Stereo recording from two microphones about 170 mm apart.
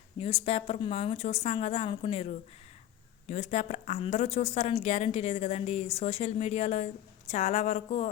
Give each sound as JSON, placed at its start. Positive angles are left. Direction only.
{"t": 0.2, "sound": "a woman's voice", "side_deg": 35}